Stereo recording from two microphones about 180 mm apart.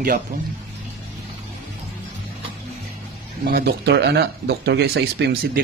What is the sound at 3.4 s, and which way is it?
Speech, 60° right (ahead or behind).